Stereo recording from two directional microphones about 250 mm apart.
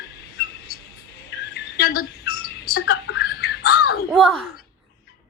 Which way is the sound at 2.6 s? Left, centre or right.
Left.